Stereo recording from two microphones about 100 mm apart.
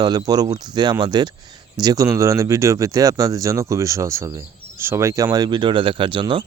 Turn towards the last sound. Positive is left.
turn(degrees=-55)  # may be behind; listen again after turning